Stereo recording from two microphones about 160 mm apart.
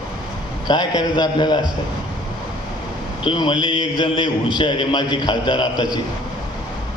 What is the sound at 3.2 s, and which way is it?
A man's voice, 25° left (ahead or behind).